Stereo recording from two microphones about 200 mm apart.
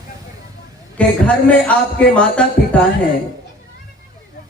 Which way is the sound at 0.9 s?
5° left (ahead or behind).